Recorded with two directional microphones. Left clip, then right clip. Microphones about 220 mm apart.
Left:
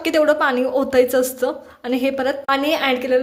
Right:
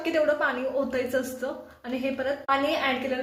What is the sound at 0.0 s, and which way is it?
A woman's voice, 50° left (ahead or behind).